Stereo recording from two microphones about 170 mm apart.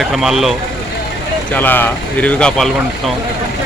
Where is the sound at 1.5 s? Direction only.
10° left (ahead or behind).